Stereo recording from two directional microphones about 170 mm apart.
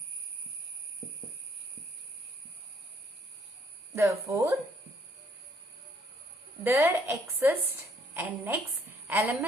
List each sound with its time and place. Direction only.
3.9 s speech: 15° right (ahead or behind)
6.7 s a woman's voice: 15° right (ahead or behind)